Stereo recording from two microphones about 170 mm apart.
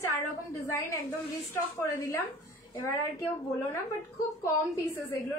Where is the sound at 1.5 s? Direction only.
15° left (ahead or behind).